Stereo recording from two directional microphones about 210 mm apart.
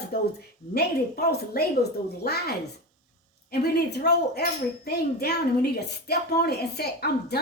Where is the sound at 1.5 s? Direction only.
50° left (ahead or behind).